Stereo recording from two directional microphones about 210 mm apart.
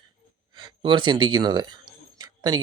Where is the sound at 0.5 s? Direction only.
20° right (ahead or behind).